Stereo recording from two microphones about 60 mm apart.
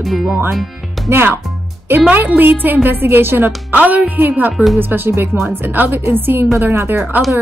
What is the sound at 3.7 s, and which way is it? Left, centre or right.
A woman's voice, right.